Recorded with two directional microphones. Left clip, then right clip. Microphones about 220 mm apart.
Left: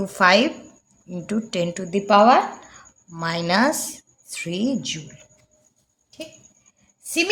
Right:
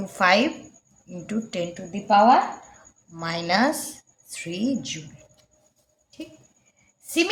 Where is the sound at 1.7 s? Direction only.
35° left (ahead or behind).